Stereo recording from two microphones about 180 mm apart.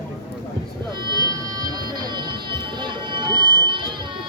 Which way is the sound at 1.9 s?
25° right (ahead or behind).